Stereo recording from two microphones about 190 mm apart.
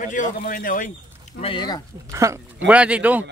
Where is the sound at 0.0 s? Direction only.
40° left (ahead or behind).